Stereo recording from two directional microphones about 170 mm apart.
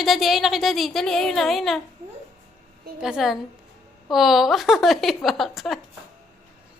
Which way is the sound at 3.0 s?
5° right (ahead or behind).